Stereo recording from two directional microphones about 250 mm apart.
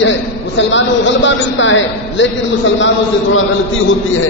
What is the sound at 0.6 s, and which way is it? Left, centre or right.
A man's voice, left.